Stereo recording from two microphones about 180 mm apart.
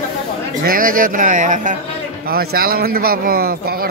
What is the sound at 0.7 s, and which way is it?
Speech, 50° right (ahead or behind).